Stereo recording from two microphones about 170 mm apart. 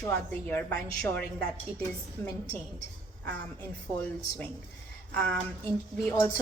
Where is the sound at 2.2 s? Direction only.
15° left (ahead or behind).